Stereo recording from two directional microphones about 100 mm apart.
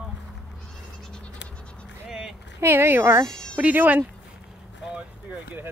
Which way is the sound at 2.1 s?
5° right (ahead or behind).